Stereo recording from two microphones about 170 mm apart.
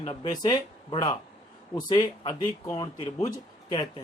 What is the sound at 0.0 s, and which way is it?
Speech, 25° left (ahead or behind).